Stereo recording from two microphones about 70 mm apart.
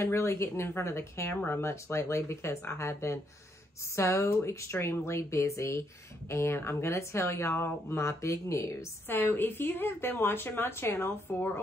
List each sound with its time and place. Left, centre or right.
0.0 s a woman's voice: left
9.1 s a woman's voice: left